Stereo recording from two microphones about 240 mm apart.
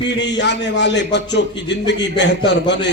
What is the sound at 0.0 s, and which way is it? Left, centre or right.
A man's voice, left.